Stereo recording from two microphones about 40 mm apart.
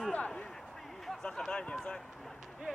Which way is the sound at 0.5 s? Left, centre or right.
Centre.